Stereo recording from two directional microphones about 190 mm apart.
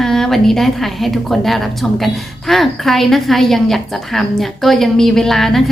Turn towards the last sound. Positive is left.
turn(degrees=0)  # may be behind; listen again after turning